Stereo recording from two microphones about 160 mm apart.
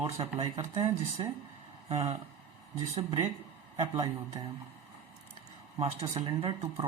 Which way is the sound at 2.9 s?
40° right (ahead or behind).